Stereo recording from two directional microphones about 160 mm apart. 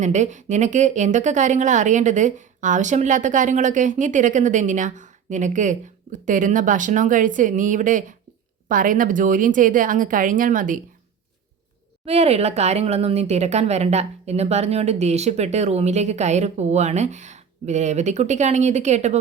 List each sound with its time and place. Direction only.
0.0 s speech: 50° right (ahead or behind)
12.0 s speech: 40° right (ahead or behind)